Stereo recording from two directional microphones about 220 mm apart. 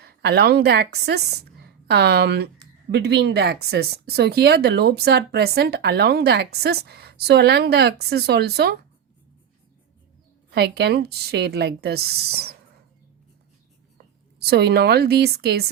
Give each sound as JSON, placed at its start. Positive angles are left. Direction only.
{"t": 0.0, "sound": "speech", "side_deg": -45}
{"t": 10.5, "sound": "speech", "side_deg": -50}
{"t": 14.4, "sound": "speech", "side_deg": -45}